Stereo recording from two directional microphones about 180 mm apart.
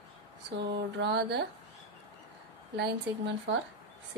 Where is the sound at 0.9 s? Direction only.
65° right (ahead or behind).